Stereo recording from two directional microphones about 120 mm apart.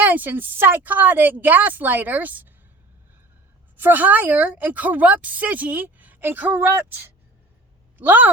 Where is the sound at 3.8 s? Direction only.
15° right (ahead or behind).